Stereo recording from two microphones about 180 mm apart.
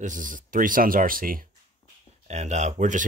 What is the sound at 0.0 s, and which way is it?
Speech, 45° right (ahead or behind).